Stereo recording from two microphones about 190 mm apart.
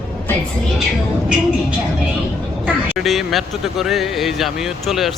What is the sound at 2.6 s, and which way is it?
Speech, centre (ahead or behind).